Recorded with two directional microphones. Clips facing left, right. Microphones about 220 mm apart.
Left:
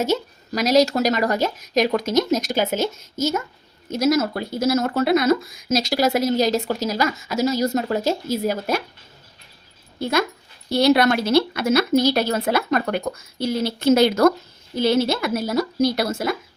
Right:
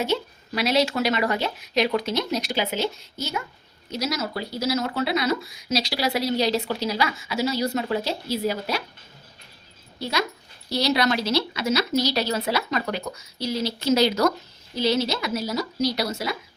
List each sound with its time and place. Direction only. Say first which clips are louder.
0.0 s speech: left 3 dB; 45° left (ahead or behind)
10.0 s speech: left 5 dB; 50° left (ahead or behind)